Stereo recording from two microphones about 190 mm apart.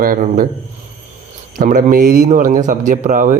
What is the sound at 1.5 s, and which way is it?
Speech, 45° right (ahead or behind).